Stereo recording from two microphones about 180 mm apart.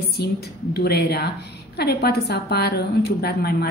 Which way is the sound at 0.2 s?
60° left (ahead or behind).